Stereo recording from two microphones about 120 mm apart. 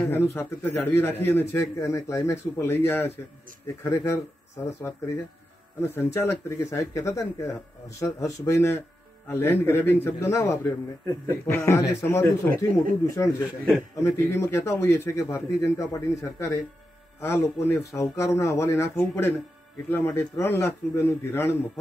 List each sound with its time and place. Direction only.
0.0 s a man's voice: 20° left (ahead or behind)
5.8 s a man's voice: 20° left (ahead or behind)